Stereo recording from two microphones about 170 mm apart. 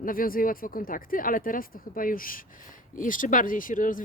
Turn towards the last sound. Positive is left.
turn(degrees=50)  # may be behind; listen again after turning